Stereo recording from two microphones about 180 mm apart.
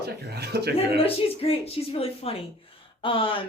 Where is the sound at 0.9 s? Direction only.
30° left (ahead or behind).